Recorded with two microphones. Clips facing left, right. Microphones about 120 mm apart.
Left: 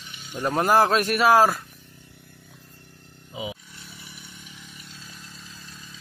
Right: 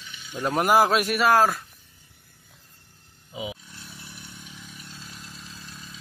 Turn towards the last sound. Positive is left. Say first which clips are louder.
# right 2 dB
turn(degrees=0)  # may be behind; listen again after turning